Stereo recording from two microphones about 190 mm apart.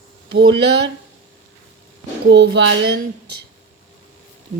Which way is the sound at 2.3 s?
65° right (ahead or behind).